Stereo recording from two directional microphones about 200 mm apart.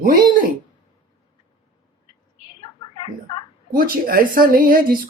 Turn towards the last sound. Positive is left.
turn(degrees=-45)  # may be behind; listen again after turning